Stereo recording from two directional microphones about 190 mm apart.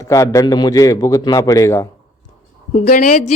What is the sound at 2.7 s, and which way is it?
Speech, 45° left (ahead or behind).